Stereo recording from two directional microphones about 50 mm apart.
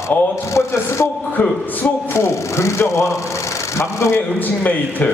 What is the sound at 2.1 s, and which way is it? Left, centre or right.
A man's voice, left.